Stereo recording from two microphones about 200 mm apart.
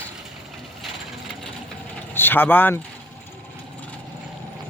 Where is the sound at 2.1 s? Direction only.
10° left (ahead or behind).